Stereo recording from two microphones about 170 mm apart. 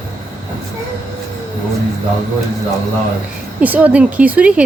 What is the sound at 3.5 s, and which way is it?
Speech, 10° right (ahead or behind).